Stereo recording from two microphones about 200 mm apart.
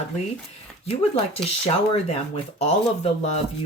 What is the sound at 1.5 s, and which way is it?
Speech, 30° left (ahead or behind).